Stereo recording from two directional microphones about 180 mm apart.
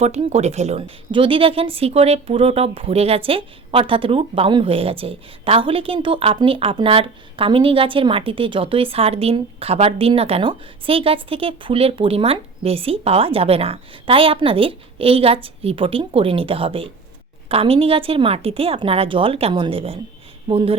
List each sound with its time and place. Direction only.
0.0 s a woman's voice: 40° right (ahead or behind)